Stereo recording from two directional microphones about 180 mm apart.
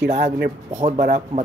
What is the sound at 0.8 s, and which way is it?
Speech, 40° right (ahead or behind).